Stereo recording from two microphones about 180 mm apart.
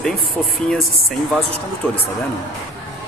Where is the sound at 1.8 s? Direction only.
5° left (ahead or behind).